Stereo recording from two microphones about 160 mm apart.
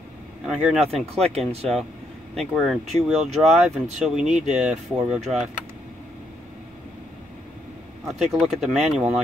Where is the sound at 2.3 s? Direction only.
Centre (ahead or behind).